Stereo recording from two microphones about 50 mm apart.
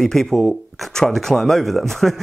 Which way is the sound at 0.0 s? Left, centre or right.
Centre.